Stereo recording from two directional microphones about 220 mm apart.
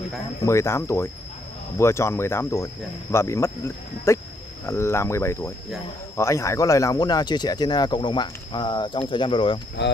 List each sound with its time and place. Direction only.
0.5 s speech: 15° left (ahead or behind)
9.8 s speech: 50° left (ahead or behind)